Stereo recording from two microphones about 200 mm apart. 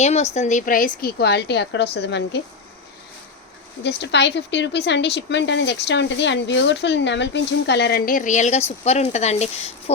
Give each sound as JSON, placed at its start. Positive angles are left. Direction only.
{"t": 0.0, "sound": "a woman's voice", "side_deg": 35}
{"t": 3.8, "sound": "a woman's voice", "side_deg": 60}